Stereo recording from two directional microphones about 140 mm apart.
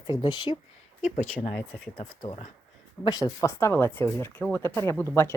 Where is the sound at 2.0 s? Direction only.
50° left (ahead or behind).